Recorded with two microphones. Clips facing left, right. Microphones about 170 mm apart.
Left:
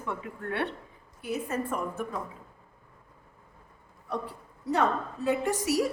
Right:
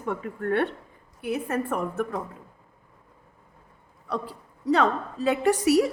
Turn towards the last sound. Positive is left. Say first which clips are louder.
# right 7 dB
turn(degrees=-70)  # may be behind; listen again after turning